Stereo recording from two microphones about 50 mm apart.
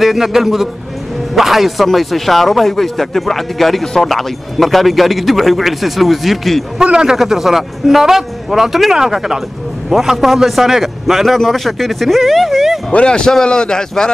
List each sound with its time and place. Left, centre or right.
0.0 s speech: centre
6.8 s a man's voice: centre
12.9 s a man's voice: centre